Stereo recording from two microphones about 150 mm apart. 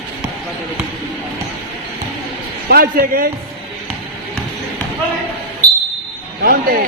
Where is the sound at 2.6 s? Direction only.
80° right.